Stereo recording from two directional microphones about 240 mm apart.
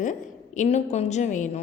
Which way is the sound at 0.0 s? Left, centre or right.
Left.